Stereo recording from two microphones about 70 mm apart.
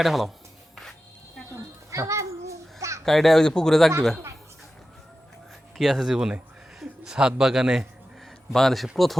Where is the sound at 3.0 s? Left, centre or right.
Centre.